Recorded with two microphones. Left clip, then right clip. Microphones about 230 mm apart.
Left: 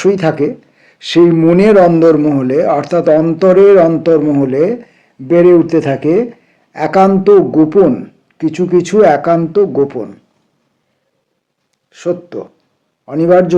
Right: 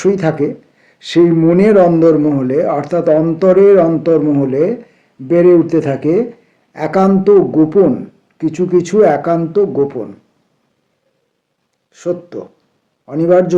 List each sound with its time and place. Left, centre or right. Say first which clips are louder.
0.0 s speech: left 2 dB; left
11.9 s speech: left 2 dB; left